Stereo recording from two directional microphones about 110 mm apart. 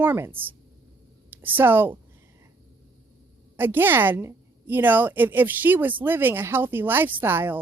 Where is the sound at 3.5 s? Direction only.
20° right (ahead or behind).